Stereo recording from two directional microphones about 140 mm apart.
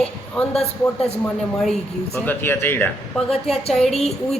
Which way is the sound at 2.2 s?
15° left (ahead or behind).